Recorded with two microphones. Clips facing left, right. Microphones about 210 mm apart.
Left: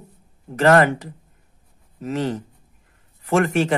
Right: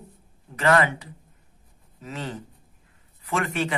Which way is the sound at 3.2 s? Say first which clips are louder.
Left 8 dB; 45° left (ahead or behind).